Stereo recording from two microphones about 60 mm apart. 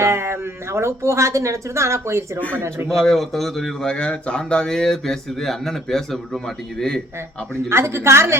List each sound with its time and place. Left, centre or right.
0.0 s speech: right
2.9 s speech: centre
7.7 s speech: right